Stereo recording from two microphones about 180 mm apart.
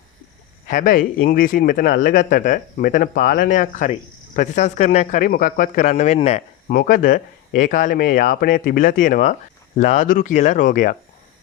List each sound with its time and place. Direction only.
0.7 s speech: 50° left (ahead or behind)
6.7 s speech: 55° left (ahead or behind)